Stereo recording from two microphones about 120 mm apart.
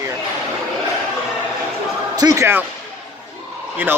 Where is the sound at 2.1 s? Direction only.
30° right (ahead or behind).